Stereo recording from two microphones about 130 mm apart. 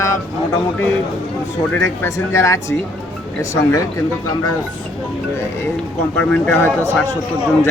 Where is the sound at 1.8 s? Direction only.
25° left (ahead or behind).